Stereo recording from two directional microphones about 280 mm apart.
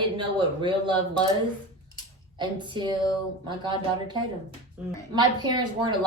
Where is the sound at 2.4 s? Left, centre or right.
Centre.